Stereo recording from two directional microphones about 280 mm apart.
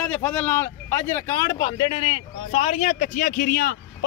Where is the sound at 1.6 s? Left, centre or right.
Centre.